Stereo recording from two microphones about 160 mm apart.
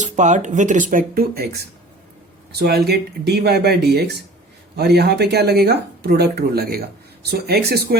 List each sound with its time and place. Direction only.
0.0 s speech: 50° right (ahead or behind); by 1.6 s 75° right (ahead or behind)
2.5 s speech: 90° right; by 6.8 s 75° right (ahead or behind)
7.3 s speech: 90° right